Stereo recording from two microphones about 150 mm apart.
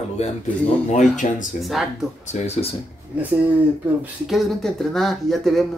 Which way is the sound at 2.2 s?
45° left (ahead or behind).